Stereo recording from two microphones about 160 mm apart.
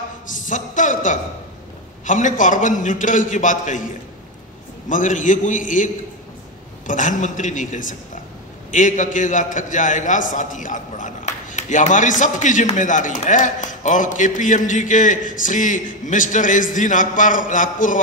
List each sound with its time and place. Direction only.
0.5 s a man's voice: 50° left (ahead or behind)
4.8 s a man's voice: 55° left (ahead or behind)
6.9 s a man's voice: 55° left (ahead or behind)